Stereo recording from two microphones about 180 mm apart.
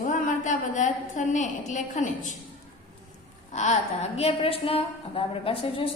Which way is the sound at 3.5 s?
40° left (ahead or behind).